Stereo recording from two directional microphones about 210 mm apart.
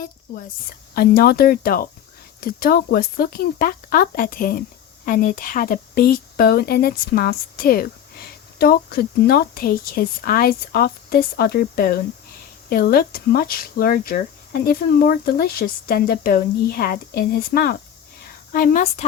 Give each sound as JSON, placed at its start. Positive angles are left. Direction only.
{"t": 0.9, "sound": "a woman's voice", "side_deg": 45}